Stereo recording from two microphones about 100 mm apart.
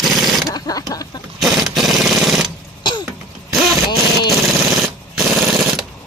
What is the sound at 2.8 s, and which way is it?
Throat clearing, 50° left (ahead or behind).